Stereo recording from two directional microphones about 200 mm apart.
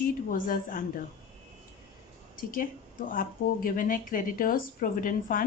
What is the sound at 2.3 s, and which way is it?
A woman's voice, 45° left (ahead or behind).